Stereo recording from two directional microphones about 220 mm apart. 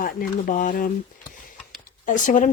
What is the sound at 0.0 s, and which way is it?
Speech, 40° left (ahead or behind).